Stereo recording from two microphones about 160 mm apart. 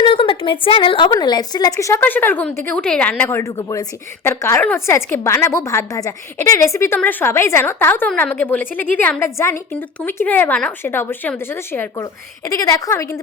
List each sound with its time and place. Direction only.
0.0 s a woman's voice: 35° left (ahead or behind); by 13.1 s 15° left (ahead or behind)